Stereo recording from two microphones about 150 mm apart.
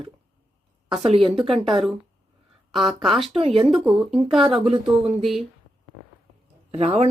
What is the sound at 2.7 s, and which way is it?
Speech, centre (ahead or behind).